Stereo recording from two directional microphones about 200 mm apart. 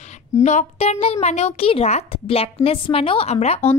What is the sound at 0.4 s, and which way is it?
Speech, 35° left (ahead or behind).